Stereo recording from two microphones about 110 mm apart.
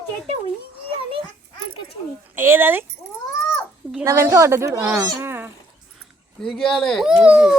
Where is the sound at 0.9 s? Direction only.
55° right (ahead or behind).